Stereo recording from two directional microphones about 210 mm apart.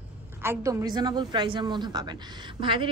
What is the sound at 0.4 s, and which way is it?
A woman's voice, 15° right (ahead or behind).